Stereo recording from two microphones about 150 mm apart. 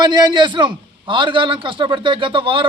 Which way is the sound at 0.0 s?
30° right (ahead or behind).